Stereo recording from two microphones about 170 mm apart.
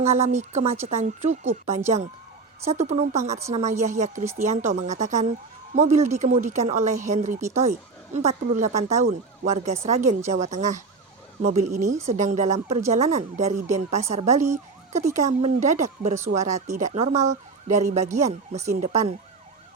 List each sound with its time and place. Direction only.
0.0 s speech: 40° right (ahead or behind)